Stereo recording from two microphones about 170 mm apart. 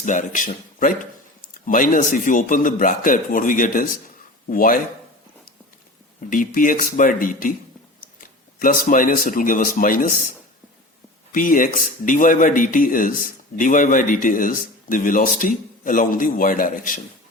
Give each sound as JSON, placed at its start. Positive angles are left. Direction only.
{"t": 0.0, "sound": "speech", "side_deg": 50}
{"t": 6.3, "sound": "speech", "side_deg": 55}
{"t": 8.6, "sound": "speech", "side_deg": 50}